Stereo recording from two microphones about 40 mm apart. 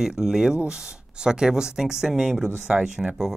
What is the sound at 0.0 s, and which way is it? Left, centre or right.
Speech, centre.